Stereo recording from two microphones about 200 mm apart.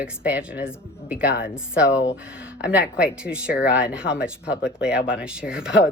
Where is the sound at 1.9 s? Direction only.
15° left (ahead or behind).